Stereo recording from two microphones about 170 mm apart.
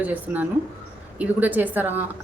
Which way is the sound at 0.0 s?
10° right (ahead or behind).